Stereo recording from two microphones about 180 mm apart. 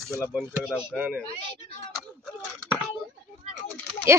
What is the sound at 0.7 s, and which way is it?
Speech, 5° right (ahead or behind).